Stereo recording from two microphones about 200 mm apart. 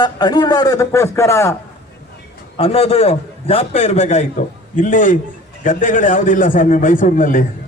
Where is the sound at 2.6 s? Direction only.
30° left (ahead or behind).